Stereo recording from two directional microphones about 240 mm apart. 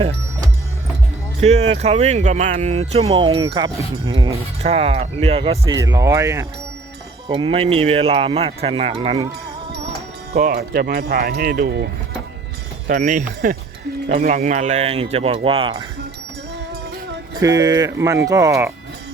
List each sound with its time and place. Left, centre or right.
1.4 s speech: right
10.3 s speech: right
12.9 s speech: right
17.3 s speech: centre